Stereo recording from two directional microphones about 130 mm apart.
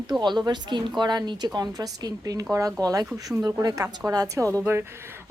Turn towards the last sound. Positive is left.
turn(degrees=-20)  # may be behind; listen again after turning